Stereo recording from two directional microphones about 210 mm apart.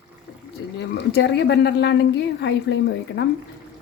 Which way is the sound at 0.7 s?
55° left (ahead or behind).